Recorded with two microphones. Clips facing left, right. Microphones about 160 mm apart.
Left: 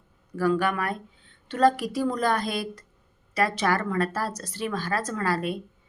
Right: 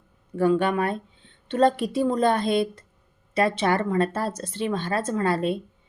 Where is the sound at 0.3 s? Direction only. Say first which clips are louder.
Right 3 dB; 25° right (ahead or behind).